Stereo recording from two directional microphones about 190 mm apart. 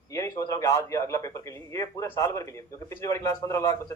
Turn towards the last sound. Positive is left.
turn(degrees=20)  # may be behind; listen again after turning